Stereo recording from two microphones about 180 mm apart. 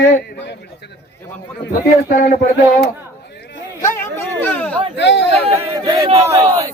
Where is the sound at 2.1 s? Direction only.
50° left (ahead or behind).